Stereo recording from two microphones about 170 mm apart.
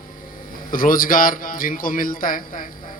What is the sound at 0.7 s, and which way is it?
A man's voice, 55° left (ahead or behind).